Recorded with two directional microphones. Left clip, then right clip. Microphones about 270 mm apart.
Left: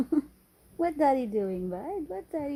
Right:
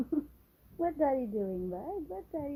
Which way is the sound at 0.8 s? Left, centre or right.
Left.